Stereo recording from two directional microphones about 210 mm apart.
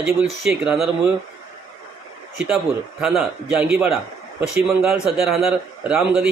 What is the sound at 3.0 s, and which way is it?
Speech, 5° right (ahead or behind).